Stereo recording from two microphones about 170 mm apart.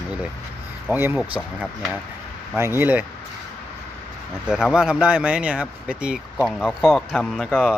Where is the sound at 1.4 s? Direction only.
5° left (ahead or behind).